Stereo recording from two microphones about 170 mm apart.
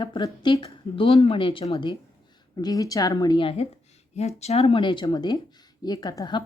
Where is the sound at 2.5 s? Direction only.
20° left (ahead or behind).